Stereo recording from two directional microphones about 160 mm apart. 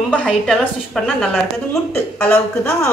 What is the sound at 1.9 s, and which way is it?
Speech, 15° left (ahead or behind).